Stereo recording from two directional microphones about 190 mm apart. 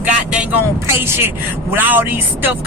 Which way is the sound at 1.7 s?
10° right (ahead or behind).